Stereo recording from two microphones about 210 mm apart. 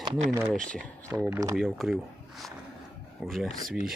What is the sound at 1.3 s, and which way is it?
Speech, 15° right (ahead or behind).